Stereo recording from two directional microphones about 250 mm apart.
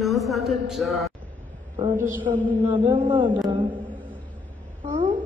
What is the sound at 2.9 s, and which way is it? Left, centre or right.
Speech, centre.